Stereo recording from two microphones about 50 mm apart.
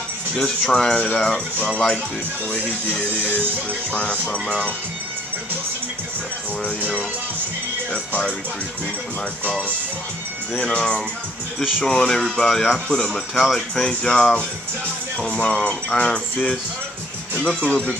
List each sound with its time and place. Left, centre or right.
0.4 s speech: centre
2.5 s speech: left
10.7 s speech: centre
13.3 s speech: centre
13.8 s speech: centre
15.1 s speech: left